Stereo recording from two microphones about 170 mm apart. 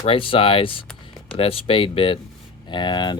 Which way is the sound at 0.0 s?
30° left (ahead or behind).